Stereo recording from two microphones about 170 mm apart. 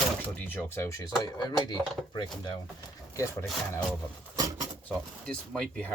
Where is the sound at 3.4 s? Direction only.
Centre (ahead or behind).